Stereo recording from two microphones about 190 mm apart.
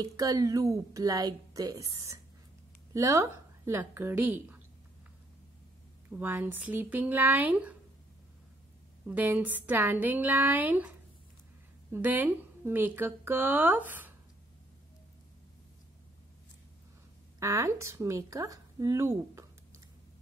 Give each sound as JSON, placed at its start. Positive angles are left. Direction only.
{"t": 0.0, "sound": "a woman's voice", "side_deg": -20}
{"t": 6.0, "sound": "a woman's voice", "side_deg": -10}
{"t": 9.0, "sound": "a woman's voice", "side_deg": -10}
{"t": 11.9, "sound": "a woman's voice", "side_deg": -10}
{"t": 17.4, "sound": "speech", "side_deg": -15}